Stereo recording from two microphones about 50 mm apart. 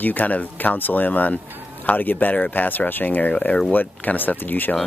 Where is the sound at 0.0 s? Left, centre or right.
Left.